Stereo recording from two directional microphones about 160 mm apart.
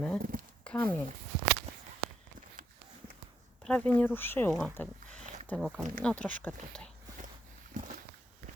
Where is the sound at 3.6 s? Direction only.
5° left (ahead or behind).